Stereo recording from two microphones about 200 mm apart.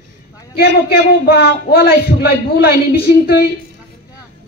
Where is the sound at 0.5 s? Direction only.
50° left (ahead or behind).